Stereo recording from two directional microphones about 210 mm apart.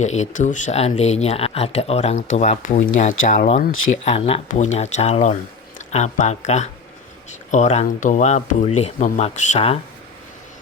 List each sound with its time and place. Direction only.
0.0 s speech: 35° left (ahead or behind)
3.7 s speech: 70° left (ahead or behind)
4.0 s speech: 30° left (ahead or behind)